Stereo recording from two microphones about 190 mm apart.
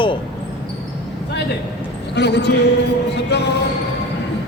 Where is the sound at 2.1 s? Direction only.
65° left (ahead or behind).